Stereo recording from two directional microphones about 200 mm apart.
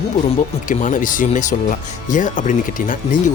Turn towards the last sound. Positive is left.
turn(degrees=40)  # may be behind; listen again after turning